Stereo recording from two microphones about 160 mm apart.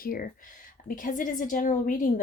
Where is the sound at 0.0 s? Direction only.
65° left (ahead or behind).